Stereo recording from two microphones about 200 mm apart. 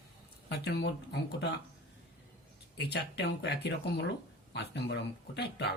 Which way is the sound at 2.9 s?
55° left (ahead or behind).